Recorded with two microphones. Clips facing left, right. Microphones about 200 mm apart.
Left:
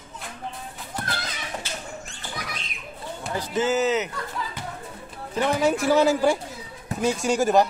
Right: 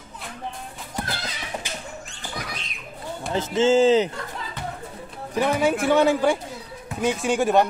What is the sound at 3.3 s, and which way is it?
Speech, 25° right (ahead or behind).